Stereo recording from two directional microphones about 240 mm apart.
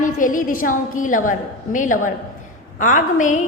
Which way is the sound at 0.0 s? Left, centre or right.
Left.